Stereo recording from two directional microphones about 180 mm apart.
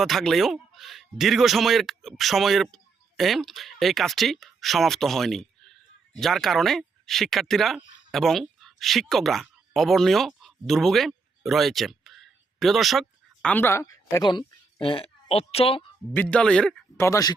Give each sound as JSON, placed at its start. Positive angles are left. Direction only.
{"t": 0.0, "sound": "speech", "side_deg": 0}
{"t": 16.1, "sound": "speech", "side_deg": 5}
{"t": 17.0, "sound": "speech", "side_deg": 20}